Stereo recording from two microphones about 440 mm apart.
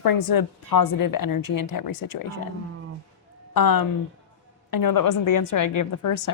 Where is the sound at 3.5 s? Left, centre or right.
Left.